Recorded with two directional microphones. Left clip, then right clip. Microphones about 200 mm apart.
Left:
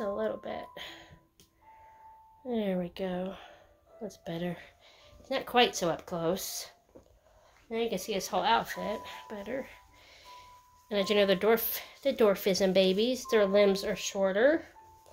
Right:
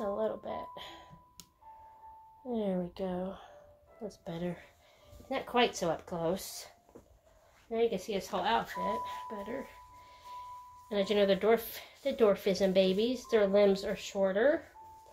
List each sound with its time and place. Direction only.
0.0 s music: 25° left (ahead or behind)
2.4 s speech: 30° left (ahead or behind)
7.7 s speech: 45° left (ahead or behind)
10.9 s speech: 45° left (ahead or behind)